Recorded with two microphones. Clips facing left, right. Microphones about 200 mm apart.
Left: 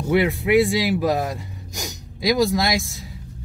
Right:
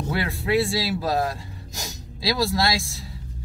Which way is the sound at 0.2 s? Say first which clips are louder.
Left 2 dB; 20° left (ahead or behind).